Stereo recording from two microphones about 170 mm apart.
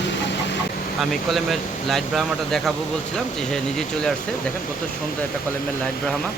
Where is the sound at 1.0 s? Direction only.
Centre (ahead or behind).